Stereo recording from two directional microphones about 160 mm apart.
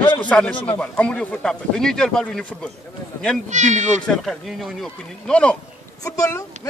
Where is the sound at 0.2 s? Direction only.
10° left (ahead or behind).